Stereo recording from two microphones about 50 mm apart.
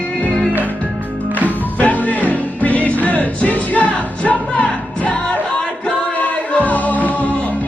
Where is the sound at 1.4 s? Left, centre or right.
Left.